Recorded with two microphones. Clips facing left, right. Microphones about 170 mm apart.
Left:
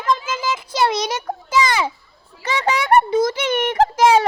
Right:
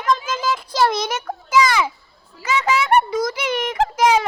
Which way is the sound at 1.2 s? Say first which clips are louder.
Right 2 dB; 25° left (ahead or behind).